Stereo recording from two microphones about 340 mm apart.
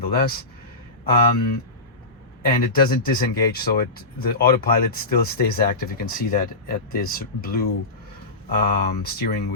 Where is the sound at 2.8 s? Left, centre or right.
Left.